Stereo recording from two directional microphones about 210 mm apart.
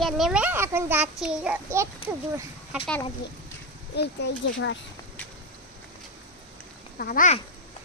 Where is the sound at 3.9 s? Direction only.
50° left (ahead or behind).